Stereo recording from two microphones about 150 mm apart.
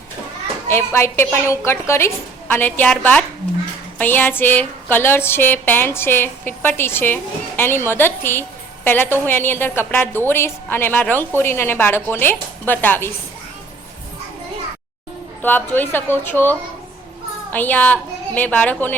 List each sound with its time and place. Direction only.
0.7 s speech: 15° left (ahead or behind)
15.4 s speech: 10° left (ahead or behind)